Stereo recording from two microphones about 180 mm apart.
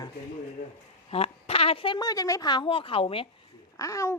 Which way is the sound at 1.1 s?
35° left (ahead or behind).